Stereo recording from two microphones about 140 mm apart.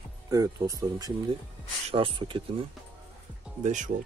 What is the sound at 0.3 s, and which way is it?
Speech, 25° right (ahead or behind).